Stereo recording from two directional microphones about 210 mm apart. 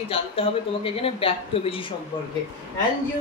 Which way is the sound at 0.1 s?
25° left (ahead or behind).